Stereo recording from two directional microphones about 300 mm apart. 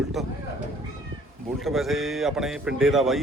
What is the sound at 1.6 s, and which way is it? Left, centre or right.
Speech, centre.